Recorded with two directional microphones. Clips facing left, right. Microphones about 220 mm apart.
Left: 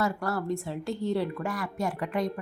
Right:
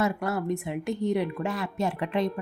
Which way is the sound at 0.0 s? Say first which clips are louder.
Right 2 dB; 20° right (ahead or behind).